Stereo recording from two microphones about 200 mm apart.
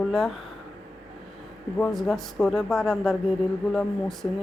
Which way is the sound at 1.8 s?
Centre (ahead or behind).